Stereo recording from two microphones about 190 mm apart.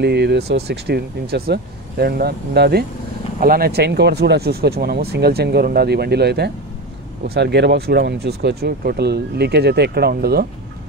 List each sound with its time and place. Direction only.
0.0 s speech: 60° right (ahead or behind)